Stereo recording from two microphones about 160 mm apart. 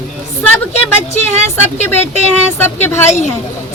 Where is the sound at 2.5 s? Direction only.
15° left (ahead or behind).